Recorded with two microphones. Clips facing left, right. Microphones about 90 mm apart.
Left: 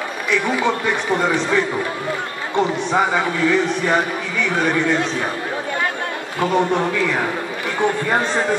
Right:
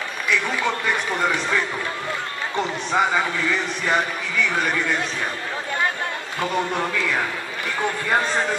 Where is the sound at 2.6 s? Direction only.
20° left (ahead or behind).